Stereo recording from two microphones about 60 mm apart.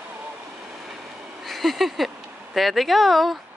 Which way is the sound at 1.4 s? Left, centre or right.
Centre.